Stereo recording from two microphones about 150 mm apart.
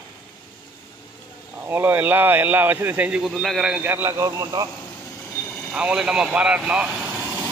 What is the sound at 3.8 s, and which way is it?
Speech, 15° right (ahead or behind).